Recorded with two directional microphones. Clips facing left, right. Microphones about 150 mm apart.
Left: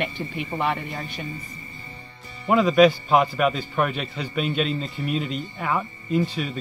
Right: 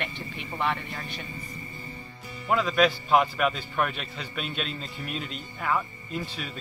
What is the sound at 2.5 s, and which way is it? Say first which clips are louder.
A man's voice: left 7 dB; 5° left (ahead or behind).